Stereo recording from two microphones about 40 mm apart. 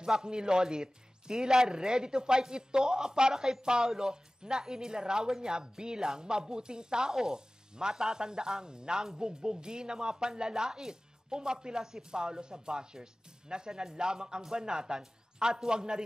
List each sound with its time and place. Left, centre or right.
0.0 s speech: centre